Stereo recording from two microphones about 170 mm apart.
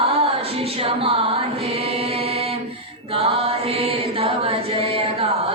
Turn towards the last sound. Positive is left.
turn(degrees=-35)  # may be behind; listen again after turning